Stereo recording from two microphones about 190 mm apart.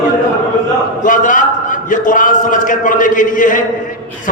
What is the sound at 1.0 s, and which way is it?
A man's voice, 45° left (ahead or behind).